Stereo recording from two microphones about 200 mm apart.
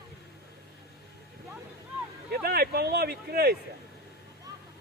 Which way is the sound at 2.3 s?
50° right (ahead or behind).